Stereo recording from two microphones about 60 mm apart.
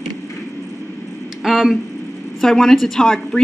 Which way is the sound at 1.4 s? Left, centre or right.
Centre.